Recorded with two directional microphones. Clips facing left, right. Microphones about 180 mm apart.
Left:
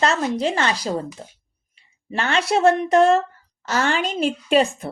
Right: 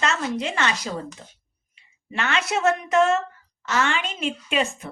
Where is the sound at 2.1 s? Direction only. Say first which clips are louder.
Left 4 dB; 35° left (ahead or behind).